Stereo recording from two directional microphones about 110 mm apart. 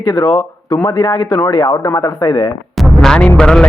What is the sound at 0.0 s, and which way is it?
Speech, 30° left (ahead or behind).